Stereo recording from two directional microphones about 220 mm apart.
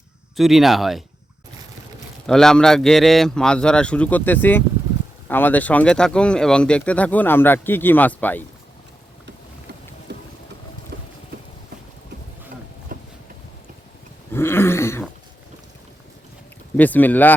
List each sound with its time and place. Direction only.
0.3 s a man's voice: centre (ahead or behind)
2.2 s a man's voice: centre (ahead or behind)
10.1 s boat: 50° right (ahead or behind)
12.9 s a sound: 40° right (ahead or behind)
14.3 s dog: 10° left (ahead or behind)
16.7 s speech: 5° left (ahead or behind)